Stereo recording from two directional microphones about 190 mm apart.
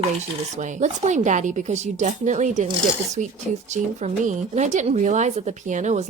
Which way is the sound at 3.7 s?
40° right (ahead or behind).